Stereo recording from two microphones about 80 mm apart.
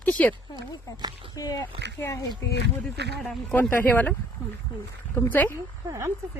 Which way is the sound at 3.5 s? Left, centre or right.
Left.